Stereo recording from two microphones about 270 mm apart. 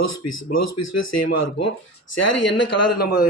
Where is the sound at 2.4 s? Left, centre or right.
Left.